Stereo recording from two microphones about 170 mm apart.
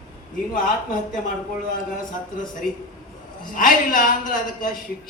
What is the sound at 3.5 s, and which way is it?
A man's voice, 50° left (ahead or behind).